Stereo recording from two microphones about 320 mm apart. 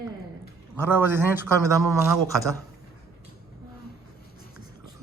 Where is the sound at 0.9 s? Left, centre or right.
Centre.